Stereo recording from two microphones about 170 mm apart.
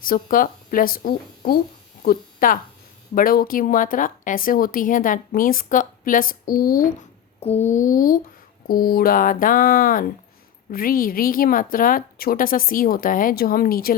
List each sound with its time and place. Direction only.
0.0 s a woman's voice: 55° left (ahead or behind)
7.3 s a sound: 40° left (ahead or behind)
8.6 s a woman's voice: 60° left (ahead or behind)